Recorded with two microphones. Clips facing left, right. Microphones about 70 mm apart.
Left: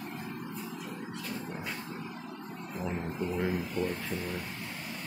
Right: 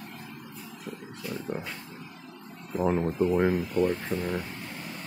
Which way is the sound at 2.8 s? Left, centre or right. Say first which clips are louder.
Right 10 dB; right.